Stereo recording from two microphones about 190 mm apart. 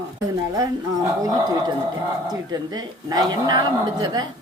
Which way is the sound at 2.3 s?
20° right (ahead or behind).